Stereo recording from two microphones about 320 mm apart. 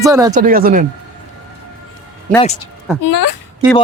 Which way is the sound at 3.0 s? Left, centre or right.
Left.